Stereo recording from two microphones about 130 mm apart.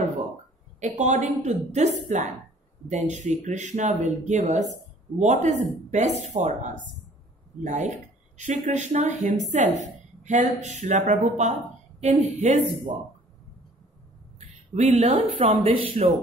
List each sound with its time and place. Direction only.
0.7 s speech: 65° right (ahead or behind)
14.8 s speech: 60° right (ahead or behind)